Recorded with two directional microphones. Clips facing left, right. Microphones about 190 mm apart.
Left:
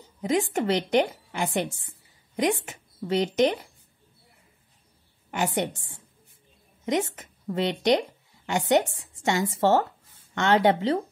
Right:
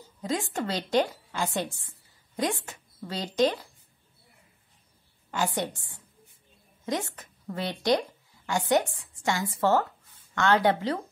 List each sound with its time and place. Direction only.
0.2 s a woman's voice: 20° left (ahead or behind)
5.3 s a woman's voice: 20° left (ahead or behind)